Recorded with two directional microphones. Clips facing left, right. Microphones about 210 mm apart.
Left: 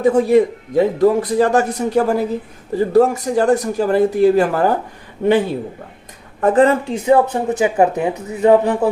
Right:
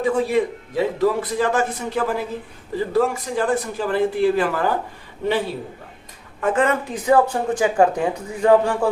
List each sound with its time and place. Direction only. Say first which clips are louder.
0.0 s a man's voice: left 7 dB; 45° left (ahead or behind)
6.4 s speech: left 7 dB; 35° left (ahead or behind); by 8.9 s 20° left (ahead or behind)